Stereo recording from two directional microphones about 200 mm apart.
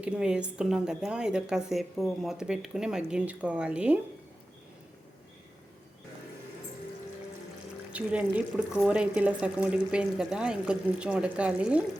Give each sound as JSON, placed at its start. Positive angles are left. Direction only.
{"t": 0.0, "sound": "a woman's voice", "side_deg": -5}
{"t": 7.9, "sound": "a woman's voice", "side_deg": -5}